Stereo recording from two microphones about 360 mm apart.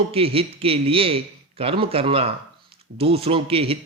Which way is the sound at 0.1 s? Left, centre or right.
Centre.